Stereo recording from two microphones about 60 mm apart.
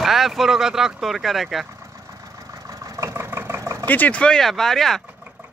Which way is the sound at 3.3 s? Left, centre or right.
Right.